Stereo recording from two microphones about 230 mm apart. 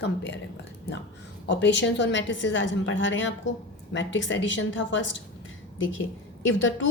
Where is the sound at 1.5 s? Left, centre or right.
Left.